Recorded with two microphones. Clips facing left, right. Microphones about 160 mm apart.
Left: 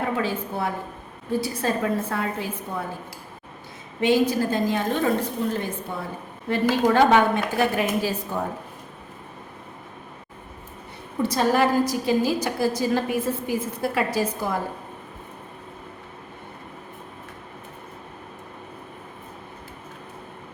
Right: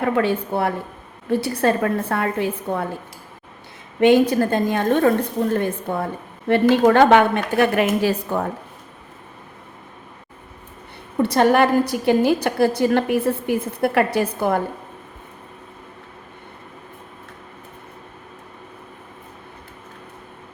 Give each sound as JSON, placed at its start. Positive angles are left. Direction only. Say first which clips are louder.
{"t": 0.2, "sound": "a woman's voice", "louder": "right 6 dB", "side_deg": -65}
{"t": 4.0, "sound": "a woman's voice", "louder": "right 6 dB", "side_deg": -60}
{"t": 11.2, "sound": "a woman's voice", "louder": "right 5 dB", "side_deg": -65}